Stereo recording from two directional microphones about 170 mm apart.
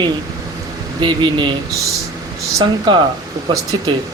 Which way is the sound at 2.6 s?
25° right (ahead or behind).